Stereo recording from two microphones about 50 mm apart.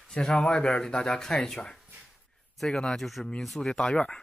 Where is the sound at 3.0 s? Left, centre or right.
Centre.